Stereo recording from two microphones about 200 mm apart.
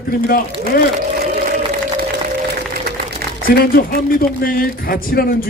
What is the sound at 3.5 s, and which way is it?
A man's voice, 50° left (ahead or behind).